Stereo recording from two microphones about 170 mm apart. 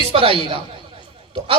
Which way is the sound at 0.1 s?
35° right (ahead or behind).